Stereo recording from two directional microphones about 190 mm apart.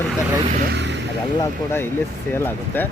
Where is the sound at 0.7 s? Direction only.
65° right (ahead or behind).